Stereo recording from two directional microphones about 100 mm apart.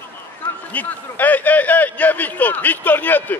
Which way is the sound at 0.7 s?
15° left (ahead or behind).